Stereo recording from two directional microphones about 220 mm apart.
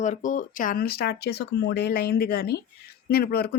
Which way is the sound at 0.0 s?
35° left (ahead or behind).